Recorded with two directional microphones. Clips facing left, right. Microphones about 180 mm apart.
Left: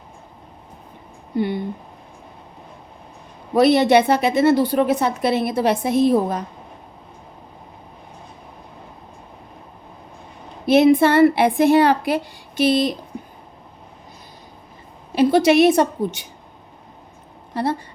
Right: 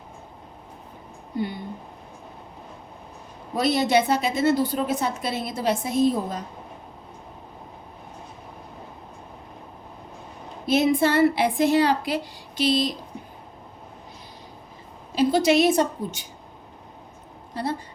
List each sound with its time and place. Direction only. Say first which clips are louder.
1.4 s speech: left 7 dB; 70° left (ahead or behind)
3.5 s a woman's voice: left 7 dB; 65° left (ahead or behind)
10.7 s a woman's voice: left 7 dB; 65° left (ahead or behind)
15.1 s a woman's voice: left 5 dB; 65° left (ahead or behind)
17.5 s speech: left 6 dB; 65° left (ahead or behind)